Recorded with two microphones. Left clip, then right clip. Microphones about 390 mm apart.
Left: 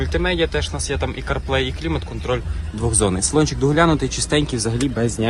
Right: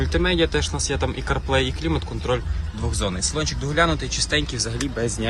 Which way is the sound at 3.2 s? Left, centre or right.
Centre.